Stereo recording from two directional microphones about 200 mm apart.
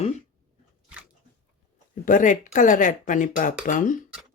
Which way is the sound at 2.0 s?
40° left (ahead or behind).